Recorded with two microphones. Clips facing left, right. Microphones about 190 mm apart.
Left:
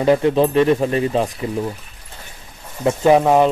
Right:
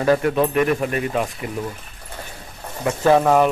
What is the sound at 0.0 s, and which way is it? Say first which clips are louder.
Speech: left 3 dB; 20° left (ahead or behind).